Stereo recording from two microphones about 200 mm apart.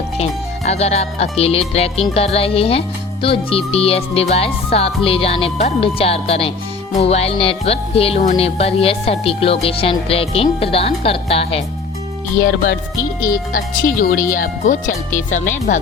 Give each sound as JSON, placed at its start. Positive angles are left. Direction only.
{"t": 0.2, "sound": "speech", "side_deg": 30}
{"t": 13.5, "sound": "speech", "side_deg": 45}